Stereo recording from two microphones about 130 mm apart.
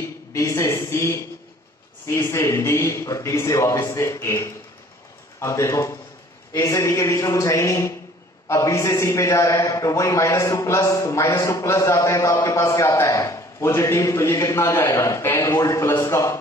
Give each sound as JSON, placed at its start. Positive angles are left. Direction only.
{"t": 0.3, "sound": "a man's voice", "side_deg": 25}